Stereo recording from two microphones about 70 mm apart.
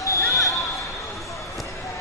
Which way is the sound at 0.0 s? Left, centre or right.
Left.